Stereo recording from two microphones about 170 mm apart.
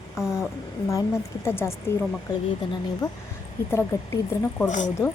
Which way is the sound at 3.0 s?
25° left (ahead or behind).